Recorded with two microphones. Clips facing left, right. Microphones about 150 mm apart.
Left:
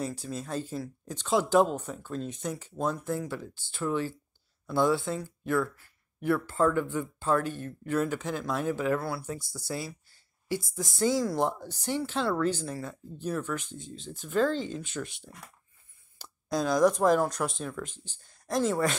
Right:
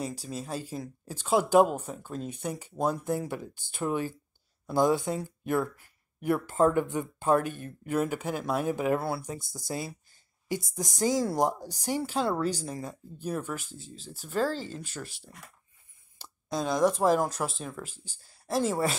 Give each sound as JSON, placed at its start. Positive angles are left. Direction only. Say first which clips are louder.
{"t": 0.0, "sound": "speech", "louder": "left 1 dB", "side_deg": -10}
{"t": 9.4, "sound": "speech", "louder": "left 1 dB", "side_deg": -50}
{"t": 9.7, "sound": "speech", "louder": "right 1 dB", "side_deg": -20}
{"t": 16.2, "sound": "speech", "louder": "left 2 dB", "side_deg": 0}